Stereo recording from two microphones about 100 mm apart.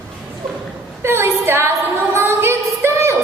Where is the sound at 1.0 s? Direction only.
25° right (ahead or behind).